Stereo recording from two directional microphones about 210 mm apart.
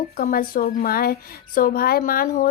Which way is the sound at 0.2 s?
45° left (ahead or behind).